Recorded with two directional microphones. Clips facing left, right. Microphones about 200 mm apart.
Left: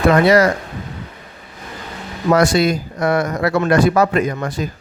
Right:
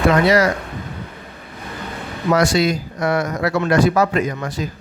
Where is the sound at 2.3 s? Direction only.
55° left (ahead or behind).